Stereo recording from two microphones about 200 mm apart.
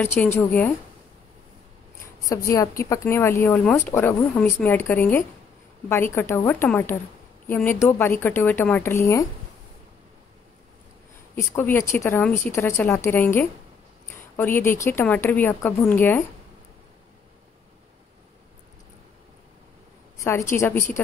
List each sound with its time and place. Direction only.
0.0 s speech: 10° left (ahead or behind)
2.2 s speech: 15° left (ahead or behind)
11.3 s speech: 10° left (ahead or behind)
20.2 s speech: 15° left (ahead or behind)